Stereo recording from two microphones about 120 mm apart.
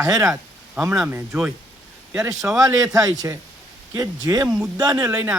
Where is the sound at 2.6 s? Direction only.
30° right (ahead or behind).